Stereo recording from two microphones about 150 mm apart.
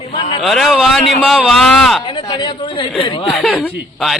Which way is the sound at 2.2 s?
30° left (ahead or behind).